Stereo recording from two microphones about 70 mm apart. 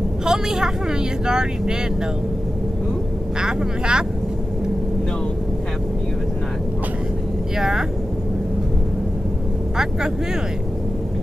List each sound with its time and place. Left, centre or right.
0.2 s a woman's voice: centre
3.3 s speech: centre
7.5 s speech: centre